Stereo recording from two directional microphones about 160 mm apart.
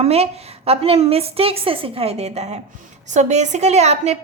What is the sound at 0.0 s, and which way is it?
Speech, 40° right (ahead or behind).